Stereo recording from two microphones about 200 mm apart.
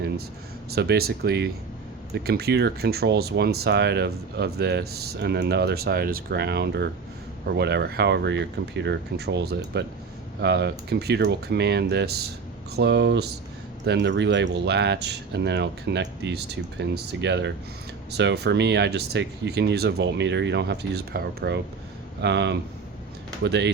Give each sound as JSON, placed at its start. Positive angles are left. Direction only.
{"t": 0.7, "sound": "speech", "side_deg": -50}